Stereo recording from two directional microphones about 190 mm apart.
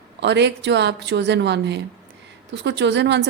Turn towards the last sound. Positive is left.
turn(degrees=-65)  # may be behind; listen again after turning